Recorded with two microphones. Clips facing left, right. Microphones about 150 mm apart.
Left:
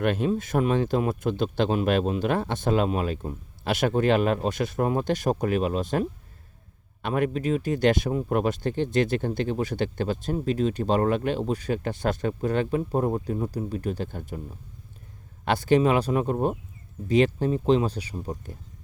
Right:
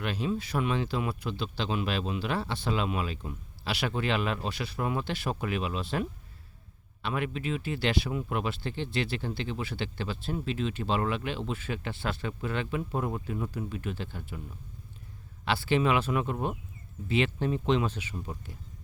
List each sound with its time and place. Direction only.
0.0 s speech: 50° left (ahead or behind)
15.4 s speech: 45° left (ahead or behind)